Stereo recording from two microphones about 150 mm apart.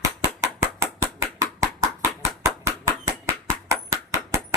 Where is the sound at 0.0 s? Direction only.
20° right (ahead or behind).